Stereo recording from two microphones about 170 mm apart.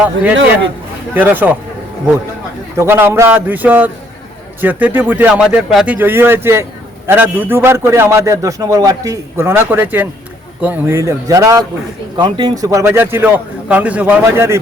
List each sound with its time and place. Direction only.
1.1 s a man's voice: 10° right (ahead or behind)
2.7 s a man's voice: 15° right (ahead or behind)